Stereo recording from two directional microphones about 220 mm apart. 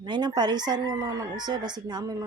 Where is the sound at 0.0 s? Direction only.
20° right (ahead or behind).